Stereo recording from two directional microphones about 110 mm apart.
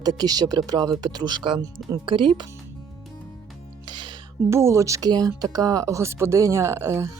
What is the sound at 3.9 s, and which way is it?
Music, 45° right (ahead or behind).